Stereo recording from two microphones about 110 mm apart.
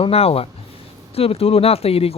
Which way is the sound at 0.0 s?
65° left (ahead or behind).